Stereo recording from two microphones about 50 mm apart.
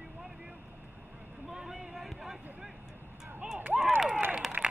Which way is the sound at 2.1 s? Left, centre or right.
Centre.